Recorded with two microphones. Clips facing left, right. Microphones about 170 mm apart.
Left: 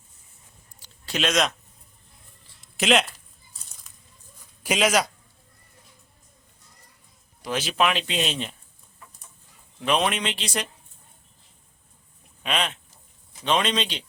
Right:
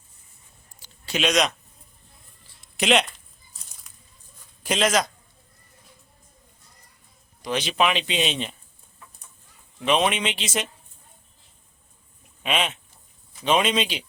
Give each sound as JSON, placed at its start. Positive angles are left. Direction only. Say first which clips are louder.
{"t": 0.8, "sound": "a sound", "louder": "right 1 dB", "side_deg": 0}
{"t": 2.6, "sound": "a sound", "louder": "even", "side_deg": 0}
{"t": 3.9, "sound": "coin", "louder": "even", "side_deg": 0}
{"t": 4.6, "sound": "a man's voice", "louder": "even", "side_deg": 10}
{"t": 7.4, "sound": "speech", "louder": "right 1 dB", "side_deg": 5}
{"t": 9.8, "sound": "speech", "louder": "right 2 dB", "side_deg": 0}
{"t": 12.4, "sound": "speech", "louder": "right 2 dB", "side_deg": -5}